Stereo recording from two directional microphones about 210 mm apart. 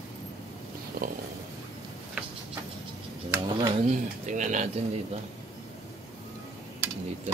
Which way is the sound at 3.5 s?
25° right (ahead or behind).